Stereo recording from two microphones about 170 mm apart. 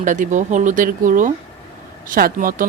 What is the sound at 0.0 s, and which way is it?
Speech, 50° right (ahead or behind).